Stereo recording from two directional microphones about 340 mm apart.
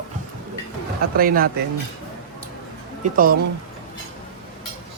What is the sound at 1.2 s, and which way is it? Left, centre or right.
Speech, right.